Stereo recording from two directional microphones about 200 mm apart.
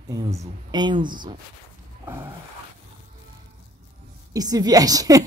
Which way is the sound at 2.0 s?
10° right (ahead or behind).